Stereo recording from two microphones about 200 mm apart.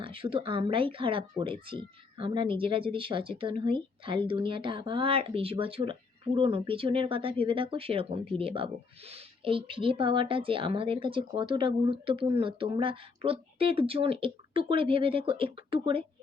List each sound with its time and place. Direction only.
0.0 s speech: 25° right (ahead or behind)